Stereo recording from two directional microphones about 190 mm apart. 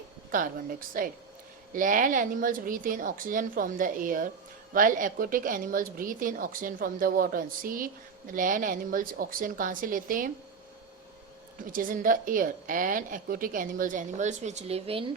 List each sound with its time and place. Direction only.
0.3 s a woman's voice: 45° right (ahead or behind)
11.6 s a woman's voice: 45° right (ahead or behind); by 15.1 s 30° right (ahead or behind)